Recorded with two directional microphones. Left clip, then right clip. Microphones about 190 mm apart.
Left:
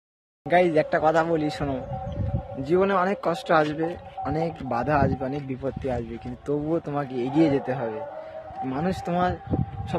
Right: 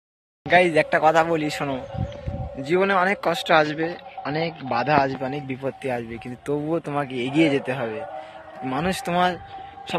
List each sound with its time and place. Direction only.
0.5 s speech: centre (ahead or behind)